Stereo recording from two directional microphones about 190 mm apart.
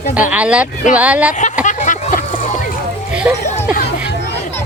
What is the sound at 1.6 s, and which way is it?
Vehicle, 40° left (ahead or behind).